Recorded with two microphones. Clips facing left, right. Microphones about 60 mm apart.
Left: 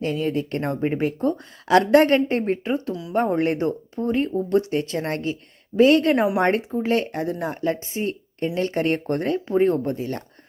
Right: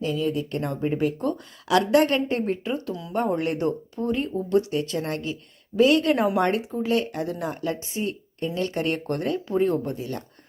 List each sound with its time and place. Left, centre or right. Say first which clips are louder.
0.0 s speech: left 2 dB; left